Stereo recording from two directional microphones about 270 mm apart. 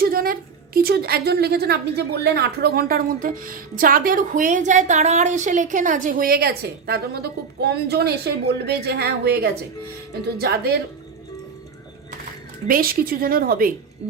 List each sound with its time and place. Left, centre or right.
0.0 s a woman's voice: right
12.6 s a woman's voice: right